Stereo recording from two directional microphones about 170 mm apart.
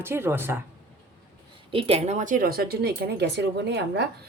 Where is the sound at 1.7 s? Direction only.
35° right (ahead or behind); by 4.1 s 90° right.